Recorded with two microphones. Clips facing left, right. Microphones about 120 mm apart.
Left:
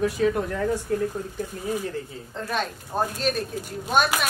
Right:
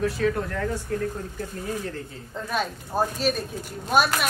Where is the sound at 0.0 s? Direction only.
15° left (ahead or behind).